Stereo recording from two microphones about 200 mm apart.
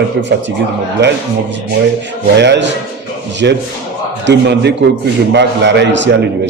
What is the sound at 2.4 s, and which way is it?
A man's voice, 60° right (ahead or behind).